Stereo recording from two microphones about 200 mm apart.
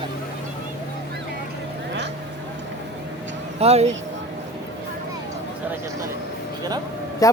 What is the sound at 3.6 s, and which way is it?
Speech, 30° right (ahead or behind).